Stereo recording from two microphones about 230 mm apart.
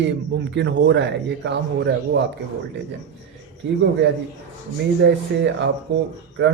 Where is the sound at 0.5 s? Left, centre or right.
Right.